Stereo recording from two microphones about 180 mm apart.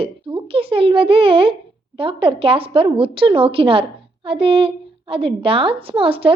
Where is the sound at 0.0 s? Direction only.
30° right (ahead or behind).